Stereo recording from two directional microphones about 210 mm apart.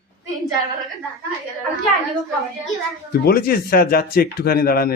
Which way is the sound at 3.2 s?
45° left (ahead or behind).